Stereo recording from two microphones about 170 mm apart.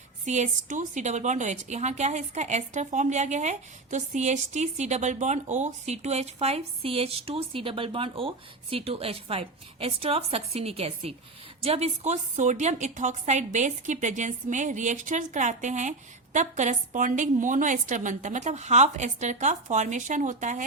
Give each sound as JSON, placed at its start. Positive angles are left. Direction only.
{"t": 0.3, "sound": "a woman's voice", "side_deg": -45}